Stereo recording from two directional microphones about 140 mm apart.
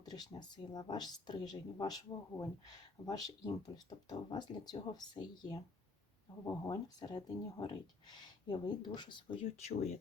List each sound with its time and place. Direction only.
0.0 s speech: 30° left (ahead or behind)
6.7 s speech: 30° left (ahead or behind); by 10.0 s 50° left (ahead or behind)